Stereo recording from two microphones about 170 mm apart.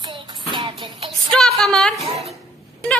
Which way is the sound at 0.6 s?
25° right (ahead or behind).